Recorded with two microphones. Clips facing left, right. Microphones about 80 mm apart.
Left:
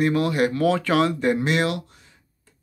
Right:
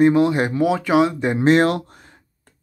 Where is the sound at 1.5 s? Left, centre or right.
Right.